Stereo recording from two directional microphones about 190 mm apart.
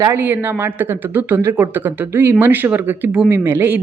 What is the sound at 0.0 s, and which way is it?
A woman's voice, 10° right (ahead or behind).